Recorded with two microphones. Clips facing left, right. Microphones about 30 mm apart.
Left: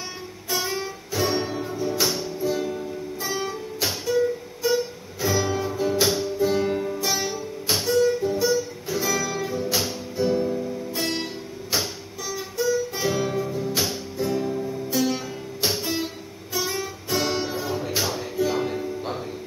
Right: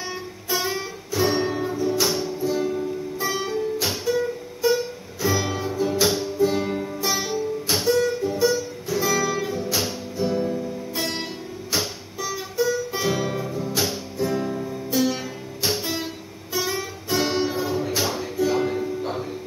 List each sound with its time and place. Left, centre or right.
0.5 s music: centre
1.8 s music: centre
12.3 s music: centre
14.3 s music: centre